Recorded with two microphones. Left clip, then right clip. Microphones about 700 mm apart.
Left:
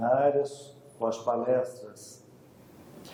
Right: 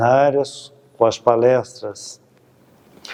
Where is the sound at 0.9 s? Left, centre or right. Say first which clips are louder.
Right 14 dB; right.